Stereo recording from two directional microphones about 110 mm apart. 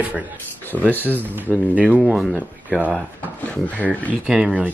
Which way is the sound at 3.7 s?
15° left (ahead or behind).